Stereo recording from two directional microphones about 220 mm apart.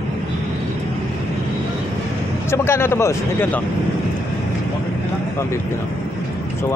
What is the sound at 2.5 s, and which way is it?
A man's voice, 10° left (ahead or behind).